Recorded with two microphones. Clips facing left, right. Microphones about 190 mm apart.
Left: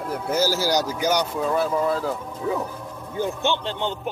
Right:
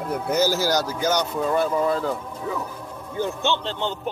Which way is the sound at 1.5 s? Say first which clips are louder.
Right 1 dB; centre (ahead or behind).